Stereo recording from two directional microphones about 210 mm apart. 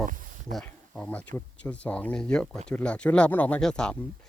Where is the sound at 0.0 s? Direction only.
40° right (ahead or behind).